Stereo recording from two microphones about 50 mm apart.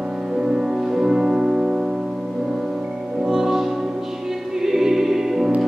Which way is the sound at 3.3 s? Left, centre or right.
Centre.